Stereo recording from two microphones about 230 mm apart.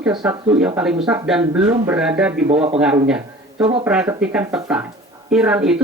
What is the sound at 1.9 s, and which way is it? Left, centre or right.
Speech, centre.